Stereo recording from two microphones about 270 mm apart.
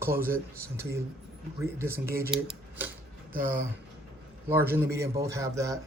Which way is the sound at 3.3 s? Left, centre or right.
Right.